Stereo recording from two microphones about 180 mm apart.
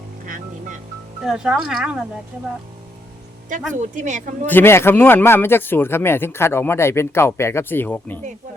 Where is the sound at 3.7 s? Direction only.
40° right (ahead or behind).